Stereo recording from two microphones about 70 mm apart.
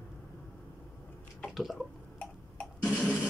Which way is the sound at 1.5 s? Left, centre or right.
Centre.